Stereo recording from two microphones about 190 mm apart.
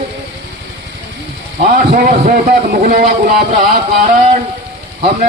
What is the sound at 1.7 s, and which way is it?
A man's voice, 50° right (ahead or behind).